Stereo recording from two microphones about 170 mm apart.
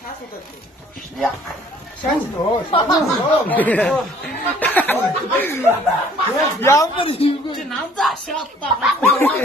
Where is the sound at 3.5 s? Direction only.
10° left (ahead or behind).